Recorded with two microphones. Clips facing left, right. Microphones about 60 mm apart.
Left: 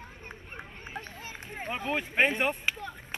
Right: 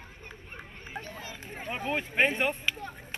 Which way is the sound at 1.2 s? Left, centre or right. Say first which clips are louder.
Left 1 dB; left.